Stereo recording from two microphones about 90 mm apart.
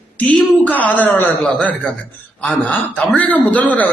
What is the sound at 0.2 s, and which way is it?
A woman's voice, 15° left (ahead or behind).